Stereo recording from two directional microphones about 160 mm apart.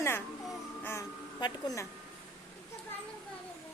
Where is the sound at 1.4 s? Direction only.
25° left (ahead or behind).